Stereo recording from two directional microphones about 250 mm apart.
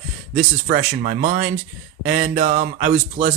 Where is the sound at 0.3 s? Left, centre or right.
Right.